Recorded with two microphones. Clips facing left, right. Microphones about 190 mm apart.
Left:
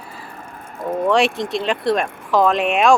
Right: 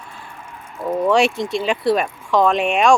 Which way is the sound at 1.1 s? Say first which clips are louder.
Even; centre (ahead or behind).